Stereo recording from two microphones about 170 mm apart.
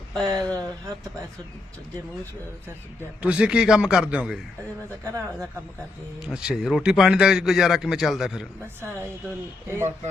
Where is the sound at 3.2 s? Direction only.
5° right (ahead or behind).